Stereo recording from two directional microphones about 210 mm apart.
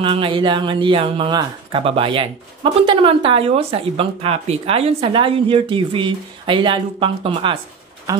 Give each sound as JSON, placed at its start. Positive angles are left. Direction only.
{"t": 0.0, "sound": "speech", "side_deg": -25}